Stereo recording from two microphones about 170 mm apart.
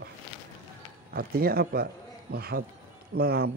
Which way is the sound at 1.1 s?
60° right (ahead or behind).